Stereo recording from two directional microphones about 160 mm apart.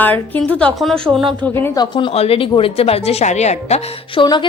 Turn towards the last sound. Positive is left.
turn(degrees=25)  # may be behind; listen again after turning